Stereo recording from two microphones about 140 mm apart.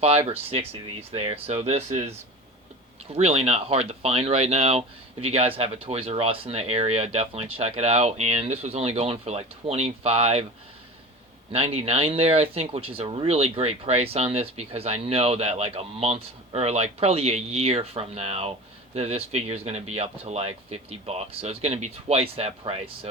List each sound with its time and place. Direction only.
0.7 s speech: 45° right (ahead or behind)
3.2 s speech: 50° right (ahead or behind)
11.5 s speech: 45° right (ahead or behind)